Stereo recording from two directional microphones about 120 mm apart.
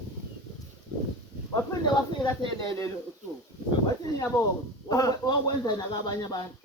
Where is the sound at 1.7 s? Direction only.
35° left (ahead or behind).